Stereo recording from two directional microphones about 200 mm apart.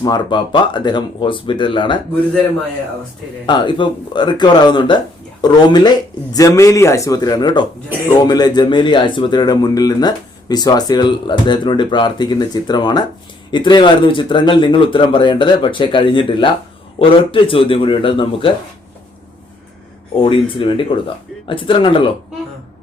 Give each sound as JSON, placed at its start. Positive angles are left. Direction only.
{"t": 0.0, "sound": "speech", "side_deg": 20}
{"t": 3.4, "sound": "speech", "side_deg": 25}
{"t": 20.1, "sound": "speech", "side_deg": 25}